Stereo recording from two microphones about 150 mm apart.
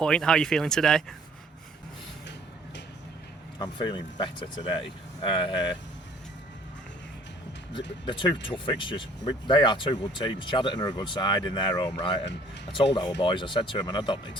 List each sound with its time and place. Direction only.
0.0 s speech: 5° left (ahead or behind)
3.6 s speech: 30° left (ahead or behind)
7.7 s speech: 35° left (ahead or behind)